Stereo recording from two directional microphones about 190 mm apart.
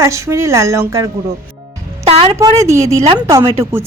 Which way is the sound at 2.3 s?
15° right (ahead or behind).